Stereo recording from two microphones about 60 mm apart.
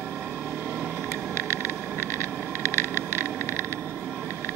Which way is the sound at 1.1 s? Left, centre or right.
Left.